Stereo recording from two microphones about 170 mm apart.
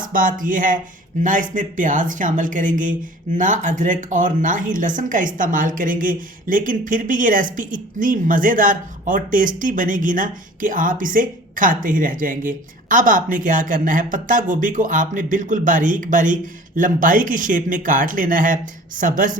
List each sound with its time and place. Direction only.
0.0 s speech: 55° right (ahead or behind)